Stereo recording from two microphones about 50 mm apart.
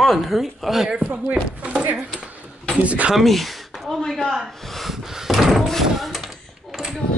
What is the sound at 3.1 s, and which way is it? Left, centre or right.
Speech, centre.